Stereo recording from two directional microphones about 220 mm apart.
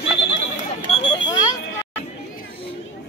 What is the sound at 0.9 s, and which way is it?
Alarm, 25° left (ahead or behind).